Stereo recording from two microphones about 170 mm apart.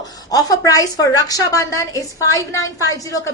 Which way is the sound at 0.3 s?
20° left (ahead or behind).